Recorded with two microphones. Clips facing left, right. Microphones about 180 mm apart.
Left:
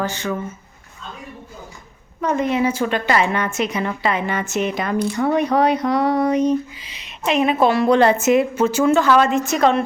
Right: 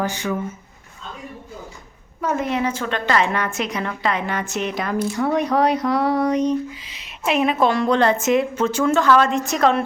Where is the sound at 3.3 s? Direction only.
Centre (ahead or behind).